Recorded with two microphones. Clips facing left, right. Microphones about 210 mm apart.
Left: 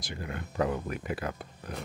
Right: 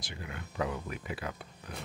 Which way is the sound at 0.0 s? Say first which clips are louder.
Left 5 dB; 45° left (ahead or behind).